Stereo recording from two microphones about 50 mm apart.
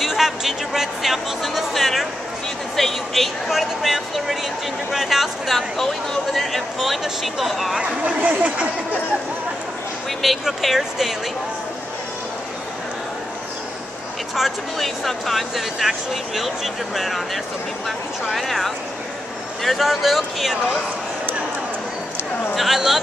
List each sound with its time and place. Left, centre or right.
0.0 s speech: centre
8.0 s speech: right
10.2 s speech: centre
14.3 s speech: centre
22.6 s speech: centre